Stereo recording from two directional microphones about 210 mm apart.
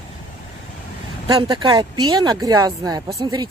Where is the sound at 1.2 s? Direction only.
25° right (ahead or behind).